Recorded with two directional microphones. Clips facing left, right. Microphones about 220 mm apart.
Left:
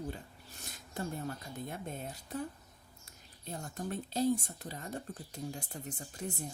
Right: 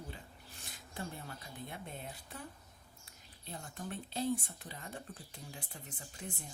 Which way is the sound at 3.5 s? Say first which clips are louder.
Left 5 dB; 45° left (ahead or behind).